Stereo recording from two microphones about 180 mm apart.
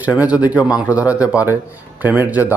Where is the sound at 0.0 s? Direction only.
5° right (ahead or behind).